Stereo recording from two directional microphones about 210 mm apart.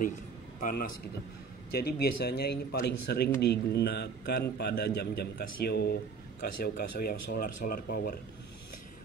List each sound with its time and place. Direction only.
0.6 s a man's voice: 40° left (ahead or behind)